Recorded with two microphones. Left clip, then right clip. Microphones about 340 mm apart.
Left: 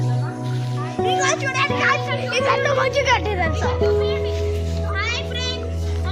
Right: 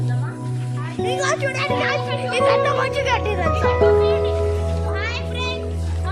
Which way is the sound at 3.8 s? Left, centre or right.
Right.